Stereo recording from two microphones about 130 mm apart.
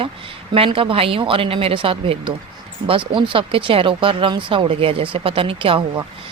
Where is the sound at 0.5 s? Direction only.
45° right (ahead or behind).